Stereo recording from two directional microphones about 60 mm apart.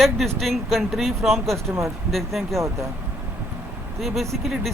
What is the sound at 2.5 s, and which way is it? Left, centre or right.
Speech, right.